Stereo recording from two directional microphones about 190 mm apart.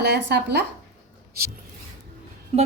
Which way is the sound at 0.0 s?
60° right (ahead or behind).